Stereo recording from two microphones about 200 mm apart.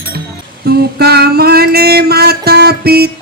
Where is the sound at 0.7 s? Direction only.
55° right (ahead or behind).